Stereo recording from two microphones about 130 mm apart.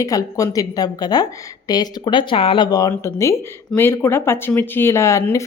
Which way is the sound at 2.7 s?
25° left (ahead or behind).